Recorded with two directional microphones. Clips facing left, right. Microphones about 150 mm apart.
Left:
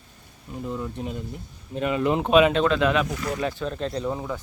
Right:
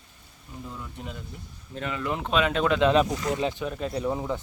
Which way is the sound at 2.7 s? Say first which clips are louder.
Right 1 dB; 20° right (ahead or behind).